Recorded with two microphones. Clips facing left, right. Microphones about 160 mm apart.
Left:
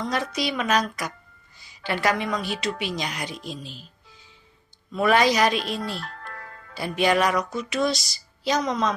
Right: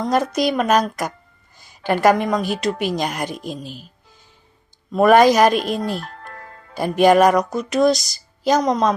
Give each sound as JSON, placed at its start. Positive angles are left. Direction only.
{"t": 0.0, "sound": "a woman's voice", "side_deg": -45}
{"t": 4.9, "sound": "a woman's voice", "side_deg": -50}
{"t": 6.2, "sound": "music", "side_deg": -25}
{"t": 6.7, "sound": "a woman's voice", "side_deg": -45}